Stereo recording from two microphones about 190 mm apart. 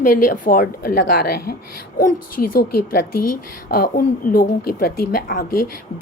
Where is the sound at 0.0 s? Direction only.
45° left (ahead or behind).